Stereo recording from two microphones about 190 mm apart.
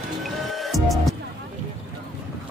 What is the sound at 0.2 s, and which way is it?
Music, centre (ahead or behind).